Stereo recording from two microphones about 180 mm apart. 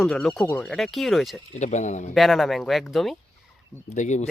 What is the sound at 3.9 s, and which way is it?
Speech, 40° left (ahead or behind).